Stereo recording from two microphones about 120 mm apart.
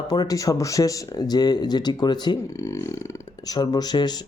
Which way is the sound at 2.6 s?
25° left (ahead or behind).